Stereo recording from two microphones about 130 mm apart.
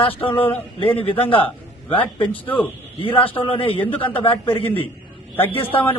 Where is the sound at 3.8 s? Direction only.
15° left (ahead or behind).